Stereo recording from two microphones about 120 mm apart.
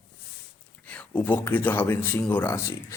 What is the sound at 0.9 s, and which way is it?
Speech, 15° left (ahead or behind).